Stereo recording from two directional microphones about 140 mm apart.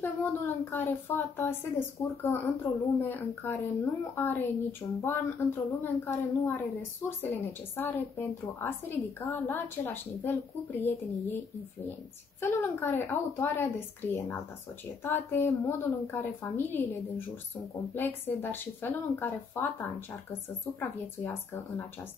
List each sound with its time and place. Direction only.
0.0 s speech: 15° left (ahead or behind)
21.2 s speech: 20° left (ahead or behind)